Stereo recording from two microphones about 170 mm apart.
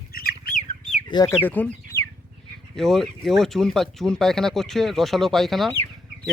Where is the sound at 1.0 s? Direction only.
25° left (ahead or behind).